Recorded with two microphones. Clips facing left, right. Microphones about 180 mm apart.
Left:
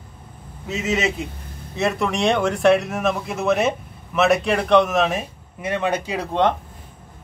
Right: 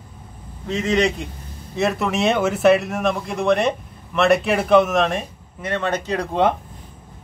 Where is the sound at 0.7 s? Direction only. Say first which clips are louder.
Right 3 dB; 5° left (ahead or behind).